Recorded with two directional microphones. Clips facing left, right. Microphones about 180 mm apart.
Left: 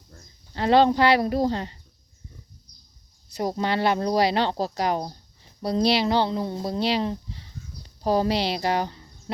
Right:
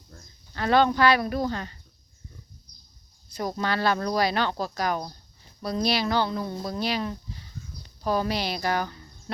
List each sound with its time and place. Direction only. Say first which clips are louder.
0.5 s speech: left 3 dB; 25° left (ahead or behind)
3.3 s speech: left 3 dB; 25° left (ahead or behind)